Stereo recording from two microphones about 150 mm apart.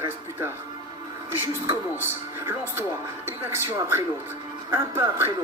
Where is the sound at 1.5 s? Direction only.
15° right (ahead or behind).